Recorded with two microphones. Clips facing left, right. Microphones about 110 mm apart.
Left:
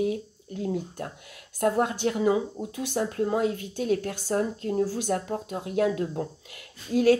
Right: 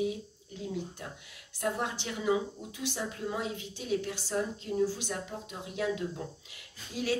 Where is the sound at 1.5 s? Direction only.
50° left (ahead or behind).